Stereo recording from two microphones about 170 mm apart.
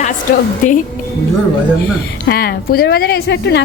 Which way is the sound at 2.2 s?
65° left (ahead or behind).